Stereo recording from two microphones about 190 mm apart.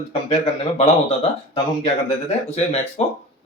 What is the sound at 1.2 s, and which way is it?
Speech, 25° left (ahead or behind).